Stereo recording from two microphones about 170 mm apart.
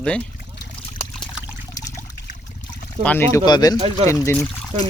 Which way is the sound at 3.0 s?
10° left (ahead or behind).